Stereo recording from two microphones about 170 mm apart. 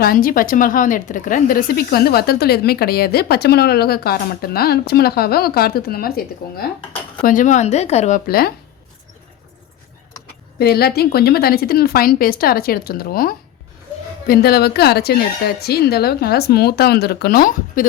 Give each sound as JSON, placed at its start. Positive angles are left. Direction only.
{"t": 0.0, "sound": "speech", "side_deg": 60}
{"t": 7.3, "sound": "speech", "side_deg": 45}
{"t": 8.3, "sound": "speech", "side_deg": 65}
{"t": 10.6, "sound": "speech", "side_deg": 65}